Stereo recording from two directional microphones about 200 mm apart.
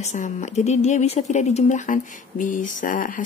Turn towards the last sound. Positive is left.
turn(degrees=40)  # may be behind; listen again after turning